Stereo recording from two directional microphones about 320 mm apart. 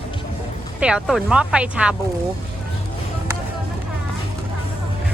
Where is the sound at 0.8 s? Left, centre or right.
Centre.